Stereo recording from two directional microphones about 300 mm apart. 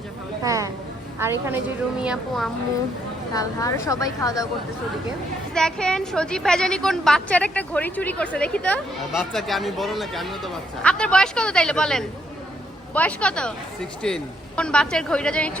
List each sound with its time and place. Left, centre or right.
0.4 s a woman's voice: centre
3.3 s a woman's voice: centre
5.5 s a woman's voice: centre